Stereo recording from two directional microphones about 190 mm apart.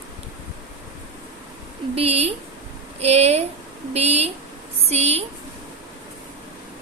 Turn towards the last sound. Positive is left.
turn(degrees=-35)  # may be behind; listen again after turning